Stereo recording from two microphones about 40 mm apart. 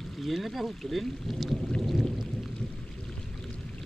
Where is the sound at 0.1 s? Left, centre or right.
Centre.